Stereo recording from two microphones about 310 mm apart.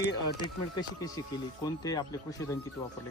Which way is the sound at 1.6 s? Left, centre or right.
Centre.